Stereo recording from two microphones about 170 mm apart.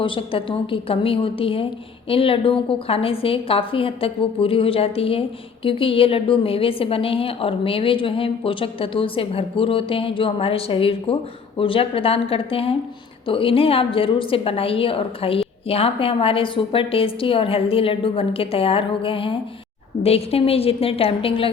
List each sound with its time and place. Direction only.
0.0 s a woman's voice: 30° left (ahead or behind)